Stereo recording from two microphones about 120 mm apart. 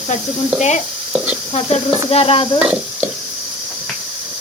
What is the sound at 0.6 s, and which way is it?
Speech, 80° left.